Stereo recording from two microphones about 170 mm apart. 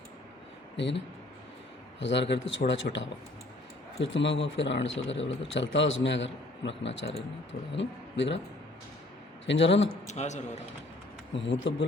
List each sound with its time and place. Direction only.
0.8 s speech: 90° left
9.5 s speech: 90° left
10.1 s a man's voice: 45° left (ahead or behind)
11.4 s speech: 90° left